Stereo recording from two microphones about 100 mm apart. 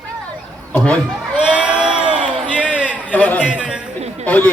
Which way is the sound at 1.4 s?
10° right (ahead or behind).